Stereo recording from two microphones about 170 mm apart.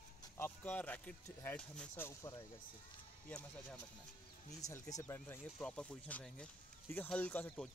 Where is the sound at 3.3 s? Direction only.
5° left (ahead or behind).